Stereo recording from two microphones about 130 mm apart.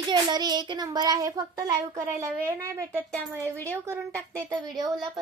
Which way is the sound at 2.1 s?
20° right (ahead or behind).